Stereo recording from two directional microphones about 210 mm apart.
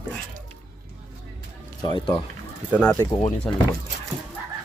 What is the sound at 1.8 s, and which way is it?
Speech, 20° left (ahead or behind).